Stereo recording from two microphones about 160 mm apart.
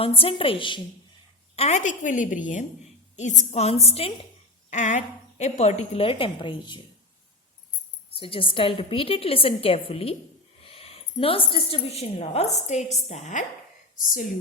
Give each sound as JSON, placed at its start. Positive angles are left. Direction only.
{"t": 0.0, "sound": "a woman's voice", "side_deg": 35}
{"t": 1.5, "sound": "a woman's voice", "side_deg": 45}
{"t": 4.7, "sound": "a woman's voice", "side_deg": 50}
{"t": 8.2, "sound": "a woman's voice", "side_deg": 35}
{"t": 13.9, "sound": "speech", "side_deg": 60}